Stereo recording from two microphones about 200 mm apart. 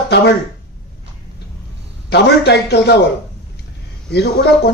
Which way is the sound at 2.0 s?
55° left (ahead or behind).